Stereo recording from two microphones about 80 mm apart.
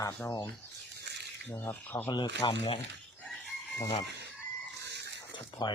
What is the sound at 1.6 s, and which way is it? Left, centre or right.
Speech, left.